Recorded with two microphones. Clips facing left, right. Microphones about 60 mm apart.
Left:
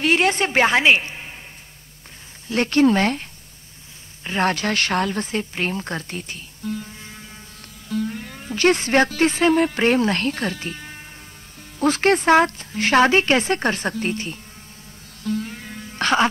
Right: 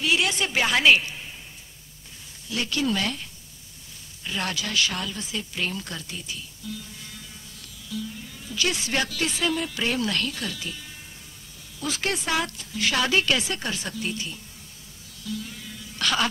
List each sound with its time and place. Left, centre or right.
0.0 s a woman's voice: left
2.4 s speech: left
7.9 s speech: left
15.2 s music: left